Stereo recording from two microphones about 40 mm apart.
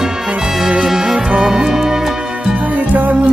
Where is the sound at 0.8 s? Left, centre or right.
Centre.